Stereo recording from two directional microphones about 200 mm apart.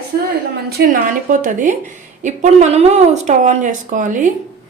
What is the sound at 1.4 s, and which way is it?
Speech, 40° right (ahead or behind).